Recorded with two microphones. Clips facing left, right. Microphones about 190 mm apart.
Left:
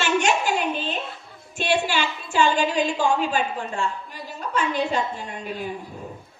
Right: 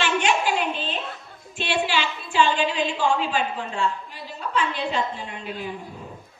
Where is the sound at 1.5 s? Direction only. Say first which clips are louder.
Left 2 dB; 45° left (ahead or behind).